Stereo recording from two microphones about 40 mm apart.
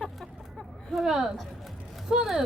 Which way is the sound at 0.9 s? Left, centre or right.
Centre.